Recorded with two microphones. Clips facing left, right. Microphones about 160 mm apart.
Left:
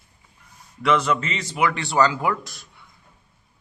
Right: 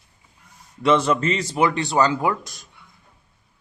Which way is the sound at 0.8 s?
25° right (ahead or behind).